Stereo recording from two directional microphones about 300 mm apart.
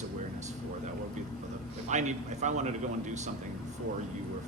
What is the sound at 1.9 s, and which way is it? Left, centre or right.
A man's voice, right.